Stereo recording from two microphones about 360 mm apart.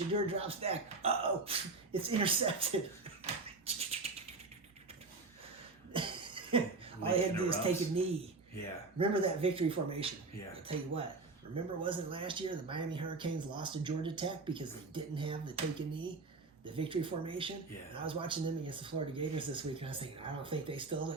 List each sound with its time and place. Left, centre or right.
0.1 s speech: centre
3.7 s bird: centre
5.9 s music: centre
7.0 s speech: centre
11.5 s speech: centre